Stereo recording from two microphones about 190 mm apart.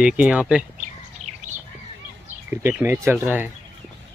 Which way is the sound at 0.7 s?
40° right (ahead or behind).